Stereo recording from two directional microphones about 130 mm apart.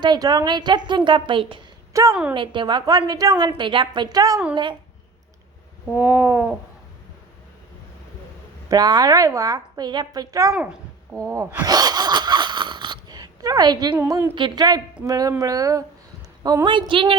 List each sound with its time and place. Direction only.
0.0 s a woman's voice: 30° right (ahead or behind)
1.9 s a woman's voice: 25° right (ahead or behind)
2.3 s a woman's voice: 40° right (ahead or behind)
6.0 s a sound: 15° right (ahead or behind)
8.7 s a woman's voice: 30° right (ahead or behind)
10.5 s speech: 10° right (ahead or behind)
11.3 s a sound: 15° right (ahead or behind)
11.6 s wheeze: 30° right (ahead or behind)
14.1 s a woman's voice: 20° right (ahead or behind)
14.3 s a woman's voice: 35° right (ahead or behind)